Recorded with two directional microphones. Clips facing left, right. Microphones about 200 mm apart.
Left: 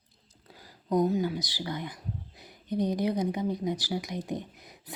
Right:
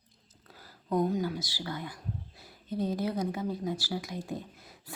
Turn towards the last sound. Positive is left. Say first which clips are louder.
# left 2 dB
turn(degrees=15)  # may be behind; listen again after turning